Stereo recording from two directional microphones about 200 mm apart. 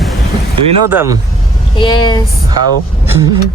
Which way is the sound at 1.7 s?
20° left (ahead or behind).